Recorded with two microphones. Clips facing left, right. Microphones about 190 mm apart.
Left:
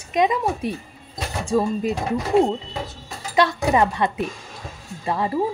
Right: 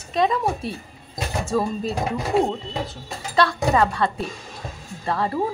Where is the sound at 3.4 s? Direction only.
20° left (ahead or behind).